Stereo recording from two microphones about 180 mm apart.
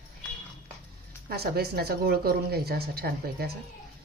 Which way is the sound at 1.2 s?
60° right (ahead or behind).